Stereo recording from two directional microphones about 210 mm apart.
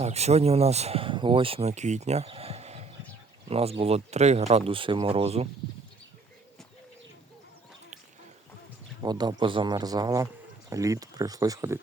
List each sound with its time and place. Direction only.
0.0 s speech: 30° right (ahead or behind)
9.0 s speech: 20° right (ahead or behind)